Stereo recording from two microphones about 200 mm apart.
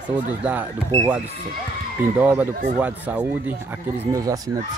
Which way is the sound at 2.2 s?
10° right (ahead or behind).